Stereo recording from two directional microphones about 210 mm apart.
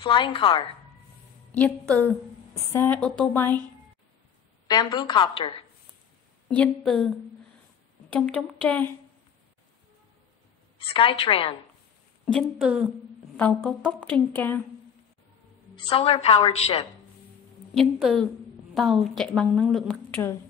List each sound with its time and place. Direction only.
0.0 s a woman's voice: 25° left (ahead or behind)
1.5 s a woman's voice: 5° left (ahead or behind)
4.6 s a woman's voice: 20° left (ahead or behind)
6.5 s a woman's voice: 5° left (ahead or behind)
8.1 s a woman's voice: 5° left (ahead or behind)
10.8 s a woman's voice: 25° left (ahead or behind)
12.3 s a woman's voice: centre (ahead or behind)
13.4 s a woman's voice: 5° left (ahead or behind)
15.7 s a woman's voice: 25° left (ahead or behind)
17.7 s a woman's voice: centre (ahead or behind)